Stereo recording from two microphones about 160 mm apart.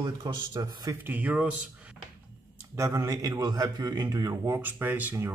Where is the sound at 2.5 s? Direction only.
20° right (ahead or behind).